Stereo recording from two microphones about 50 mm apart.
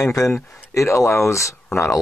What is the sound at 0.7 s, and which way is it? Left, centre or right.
Speech, left.